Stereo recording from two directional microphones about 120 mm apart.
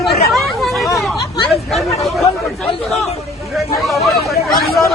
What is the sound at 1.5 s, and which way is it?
Speech, centre (ahead or behind).